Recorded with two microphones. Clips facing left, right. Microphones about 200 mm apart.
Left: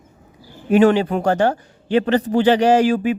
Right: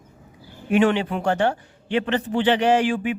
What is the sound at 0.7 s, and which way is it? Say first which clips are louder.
A man's voice: left 5 dB; 40° left (ahead or behind).